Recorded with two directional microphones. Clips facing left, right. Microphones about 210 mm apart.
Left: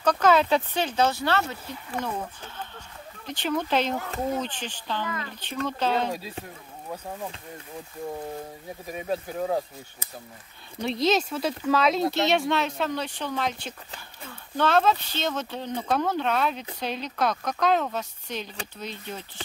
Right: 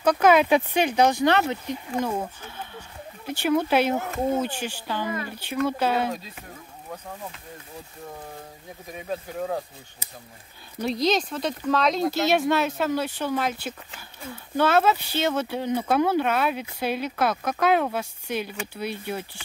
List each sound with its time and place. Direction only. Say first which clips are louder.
0.0 s speech: right 3 dB; 10° right (ahead or behind)
10.8 s speech: even; centre (ahead or behind)